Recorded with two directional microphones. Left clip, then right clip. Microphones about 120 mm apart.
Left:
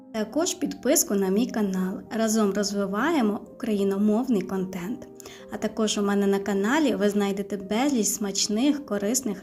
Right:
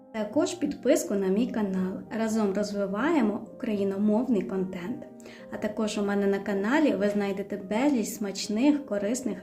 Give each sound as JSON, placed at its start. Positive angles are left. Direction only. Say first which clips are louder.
{"t": 0.2, "sound": "a woman's voice", "louder": "left 1 dB", "side_deg": 35}
{"t": 5.6, "sound": "a woman's voice", "louder": "left 4 dB", "side_deg": 30}